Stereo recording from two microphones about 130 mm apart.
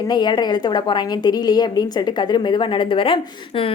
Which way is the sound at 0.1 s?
35° left (ahead or behind).